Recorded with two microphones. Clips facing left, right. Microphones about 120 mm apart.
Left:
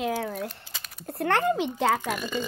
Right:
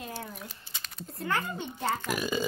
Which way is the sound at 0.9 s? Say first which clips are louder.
Left 7 dB; 65° left (ahead or behind).